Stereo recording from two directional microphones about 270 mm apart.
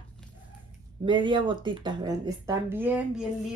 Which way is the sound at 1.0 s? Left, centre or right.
Centre.